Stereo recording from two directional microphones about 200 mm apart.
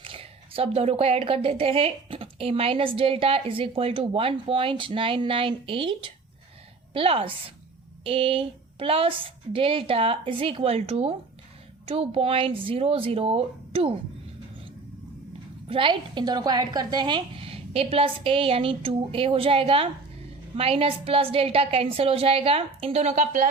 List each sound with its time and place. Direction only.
0.0 s a woman's voice: 30° right (ahead or behind)
15.7 s a woman's voice: 25° right (ahead or behind)